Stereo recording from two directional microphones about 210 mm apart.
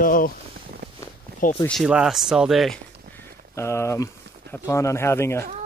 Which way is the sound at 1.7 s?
Centre (ahead or behind).